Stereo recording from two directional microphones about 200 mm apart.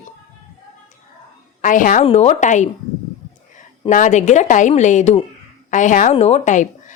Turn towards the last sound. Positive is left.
turn(degrees=40)  # may be behind; listen again after turning